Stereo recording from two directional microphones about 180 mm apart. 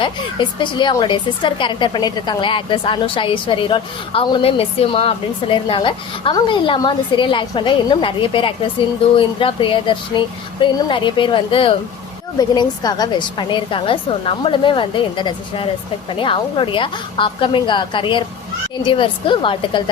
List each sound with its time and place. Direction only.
0.0 s speech: 25° left (ahead or behind)